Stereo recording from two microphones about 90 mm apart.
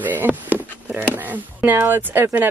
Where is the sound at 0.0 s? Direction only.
20° right (ahead or behind).